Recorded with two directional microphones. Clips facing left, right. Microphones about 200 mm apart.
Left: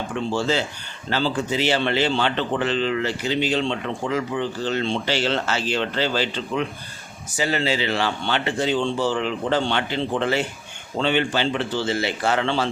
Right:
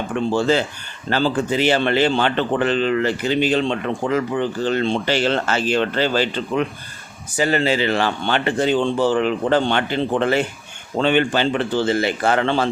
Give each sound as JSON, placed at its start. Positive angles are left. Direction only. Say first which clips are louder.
{"t": 0.3, "sound": "speech", "louder": "right 5 dB", "side_deg": -50}